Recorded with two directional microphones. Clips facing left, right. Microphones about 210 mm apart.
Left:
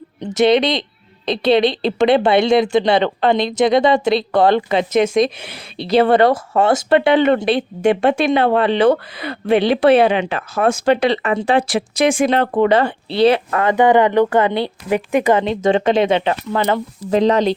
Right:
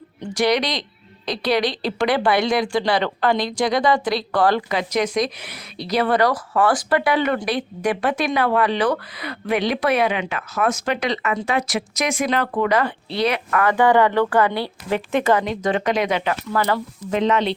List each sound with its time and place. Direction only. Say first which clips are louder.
0.2 s a woman's voice: left 6 dB; 25° left (ahead or behind)
17.0 s speech: left 6 dB; 35° left (ahead or behind)